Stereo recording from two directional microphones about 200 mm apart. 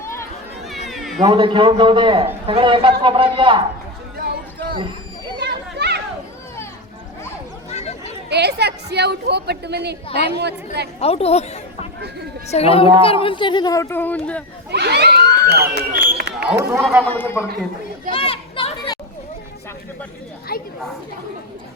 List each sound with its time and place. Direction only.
0.0 s run: 15° left (ahead or behind)
0.9 s cat: centre (ahead or behind)
1.2 s a man's voice: 25° right (ahead or behind)
4.2 s a sound: 50° right (ahead or behind)
5.4 s chatter: 55° right (ahead or behind)
7.7 s a sound: 30° left (ahead or behind)
8.3 s a woman's voice: 55° right (ahead or behind)
11.0 s speech: 30° left (ahead or behind); by 14.4 s 5° left (ahead or behind)
14.7 s a sound: 55° right (ahead or behind)
17.0 s a man's voice: 10° left (ahead or behind)
18.1 s a sound: 30° left (ahead or behind)
20.5 s chatter: 50° left (ahead or behind)